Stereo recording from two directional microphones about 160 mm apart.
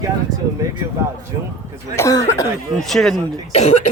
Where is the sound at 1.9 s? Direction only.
20° left (ahead or behind).